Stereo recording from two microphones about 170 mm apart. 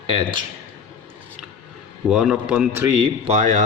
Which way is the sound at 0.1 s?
30° right (ahead or behind).